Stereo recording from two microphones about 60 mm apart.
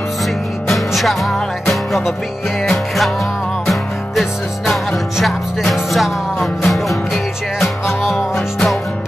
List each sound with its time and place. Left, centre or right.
0.7 s music: centre